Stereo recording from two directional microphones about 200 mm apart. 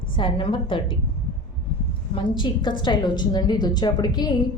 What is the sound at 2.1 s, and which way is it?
A woman's voice, 25° left (ahead or behind).